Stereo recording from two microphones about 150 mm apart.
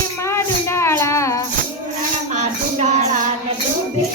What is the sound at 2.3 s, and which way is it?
Music, 50° right (ahead or behind).